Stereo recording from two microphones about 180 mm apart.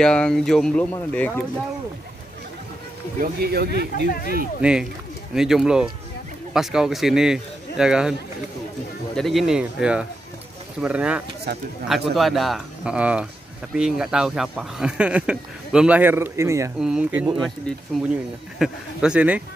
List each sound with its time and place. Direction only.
0.0 s speech: 5° left (ahead or behind)
3.2 s speech: 60° right (ahead or behind)
4.1 s speech: 50° left (ahead or behind)
4.6 s speech: 5° right (ahead or behind)
9.1 s speech: centre (ahead or behind)
11.5 s speech: 60° right (ahead or behind)
11.9 s speech: centre (ahead or behind); by 16.7 s 15° right (ahead or behind)
16.8 s speech: 5° right (ahead or behind)
18.6 s speech: 5° right (ahead or behind)